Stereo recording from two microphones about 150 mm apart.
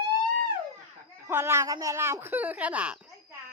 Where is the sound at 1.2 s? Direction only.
15° right (ahead or behind).